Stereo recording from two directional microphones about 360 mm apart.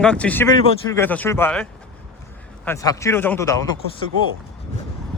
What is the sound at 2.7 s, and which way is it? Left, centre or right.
Speech, centre.